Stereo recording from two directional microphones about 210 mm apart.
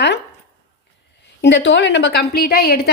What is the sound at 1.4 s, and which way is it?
A woman's voice, 60° left (ahead or behind).